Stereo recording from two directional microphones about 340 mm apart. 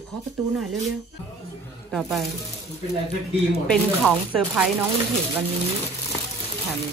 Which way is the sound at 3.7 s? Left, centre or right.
Centre.